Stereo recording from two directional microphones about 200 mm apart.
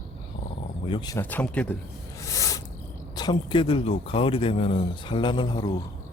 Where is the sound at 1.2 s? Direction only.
10° left (ahead or behind).